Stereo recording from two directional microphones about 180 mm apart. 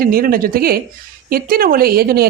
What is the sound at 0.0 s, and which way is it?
A woman's voice, 55° right (ahead or behind).